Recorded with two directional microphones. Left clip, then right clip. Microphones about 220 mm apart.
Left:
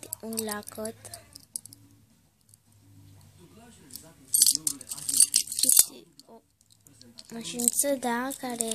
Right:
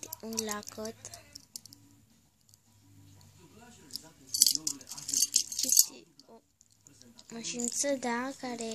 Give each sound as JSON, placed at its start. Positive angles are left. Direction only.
{"t": 0.4, "sound": "speech", "side_deg": 5}
{"t": 3.9, "sound": "rattle", "side_deg": 20}
{"t": 7.2, "sound": "speech", "side_deg": 5}